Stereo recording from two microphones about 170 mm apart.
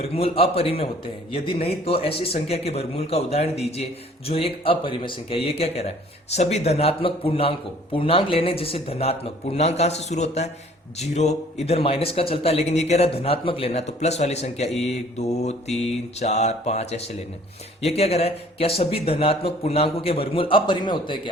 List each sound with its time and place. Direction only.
0.0 s a man's voice: 35° left (ahead or behind)
14.7 s speech: centre (ahead or behind)
14.9 s a man's voice: 40° left (ahead or behind)